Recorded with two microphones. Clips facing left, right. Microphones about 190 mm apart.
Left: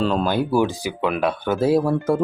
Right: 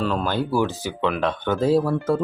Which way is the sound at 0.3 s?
15° left (ahead or behind).